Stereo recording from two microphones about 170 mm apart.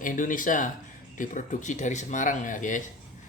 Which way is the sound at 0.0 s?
50° left (ahead or behind).